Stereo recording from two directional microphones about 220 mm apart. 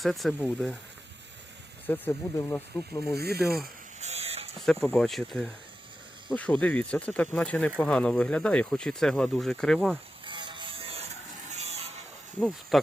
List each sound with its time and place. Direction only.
0.0 s speech: centre (ahead or behind)
1.9 s speech: 10° left (ahead or behind)
3.2 s speech: 45° right (ahead or behind)
4.0 s electric shaver: 30° right (ahead or behind)
4.6 s speech: centre (ahead or behind)
10.2 s music: 20° right (ahead or behind)
11.5 s a sound: 30° right (ahead or behind)
12.4 s speech: 5° right (ahead or behind)